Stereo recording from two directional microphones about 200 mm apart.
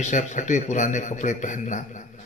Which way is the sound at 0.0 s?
35° left (ahead or behind).